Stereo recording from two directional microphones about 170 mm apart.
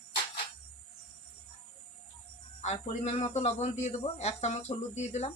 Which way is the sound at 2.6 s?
40° left (ahead or behind).